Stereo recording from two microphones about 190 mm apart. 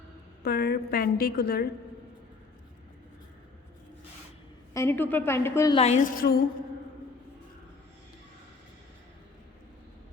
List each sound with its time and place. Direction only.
0.4 s a woman's voice: 55° left (ahead or behind)
4.7 s a woman's voice: 15° left (ahead or behind)
5.7 s a woman's voice: 35° left (ahead or behind)